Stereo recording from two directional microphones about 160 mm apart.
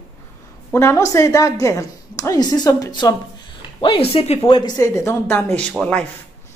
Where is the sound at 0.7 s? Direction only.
15° left (ahead or behind).